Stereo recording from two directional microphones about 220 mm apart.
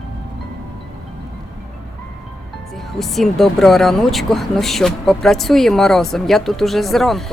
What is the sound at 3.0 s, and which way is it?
Speech, centre (ahead or behind).